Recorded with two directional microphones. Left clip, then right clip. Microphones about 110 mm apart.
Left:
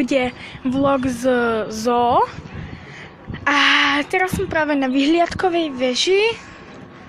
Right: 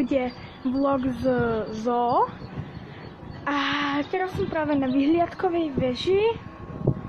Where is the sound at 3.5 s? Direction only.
20° left (ahead or behind).